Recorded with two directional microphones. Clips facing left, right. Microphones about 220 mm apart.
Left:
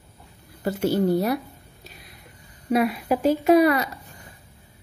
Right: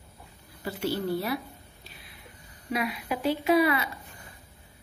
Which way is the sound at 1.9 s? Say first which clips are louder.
Left 6 dB; 40° left (ahead or behind).